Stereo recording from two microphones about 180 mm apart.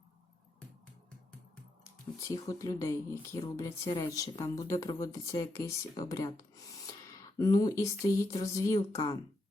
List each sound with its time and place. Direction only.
1.8 s speech: 20° left (ahead or behind)